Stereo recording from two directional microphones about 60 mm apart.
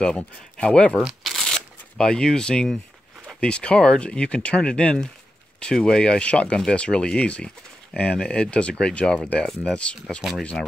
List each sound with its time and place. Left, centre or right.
0.0 s speech: centre
1.2 s shuffling cards: centre
2.0 s speech: centre